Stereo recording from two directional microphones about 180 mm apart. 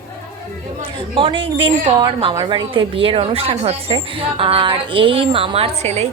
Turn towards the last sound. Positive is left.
turn(degrees=-35)  # may be behind; listen again after turning